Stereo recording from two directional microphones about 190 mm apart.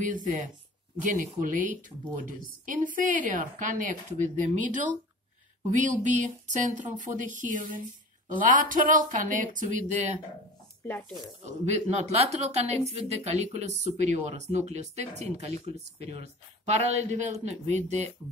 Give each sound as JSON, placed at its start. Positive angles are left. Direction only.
{"t": 0.0, "sound": "a woman's voice", "side_deg": -40}
{"t": 10.9, "sound": "speech", "side_deg": 5}
{"t": 11.6, "sound": "speech", "side_deg": -35}